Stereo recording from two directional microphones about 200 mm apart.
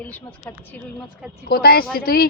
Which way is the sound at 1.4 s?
50° left (ahead or behind).